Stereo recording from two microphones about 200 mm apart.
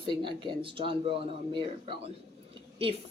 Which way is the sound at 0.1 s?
25° right (ahead or behind).